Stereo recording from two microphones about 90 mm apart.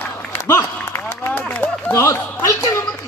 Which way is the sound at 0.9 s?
30° left (ahead or behind).